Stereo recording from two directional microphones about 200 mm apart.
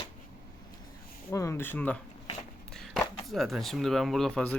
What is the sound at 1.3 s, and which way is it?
Speech, 15° left (ahead or behind).